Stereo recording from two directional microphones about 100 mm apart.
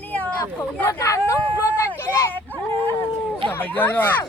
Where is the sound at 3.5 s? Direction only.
20° left (ahead or behind).